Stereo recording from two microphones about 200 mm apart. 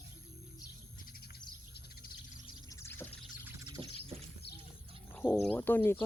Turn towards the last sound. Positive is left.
turn(degrees=10)  # may be behind; listen again after turning